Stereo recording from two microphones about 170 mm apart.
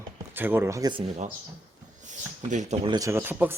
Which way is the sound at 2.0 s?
45° right (ahead or behind).